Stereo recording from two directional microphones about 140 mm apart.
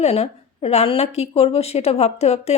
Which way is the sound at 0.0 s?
45° left (ahead or behind).